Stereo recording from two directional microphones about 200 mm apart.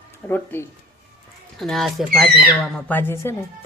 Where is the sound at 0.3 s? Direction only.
10° left (ahead or behind).